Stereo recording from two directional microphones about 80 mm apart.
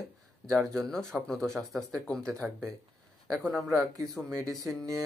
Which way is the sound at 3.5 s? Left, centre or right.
Centre.